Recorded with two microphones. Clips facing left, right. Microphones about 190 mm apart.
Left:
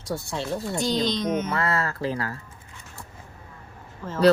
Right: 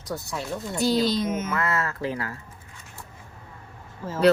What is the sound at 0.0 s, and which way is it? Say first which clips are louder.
Speech: left 2 dB; 30° left (ahead or behind).